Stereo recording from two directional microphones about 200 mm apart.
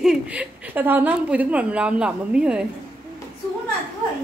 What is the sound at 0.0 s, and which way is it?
A woman's voice, 5° right (ahead or behind).